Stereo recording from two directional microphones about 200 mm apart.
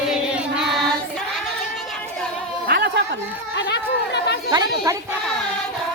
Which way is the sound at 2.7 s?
55° right (ahead or behind).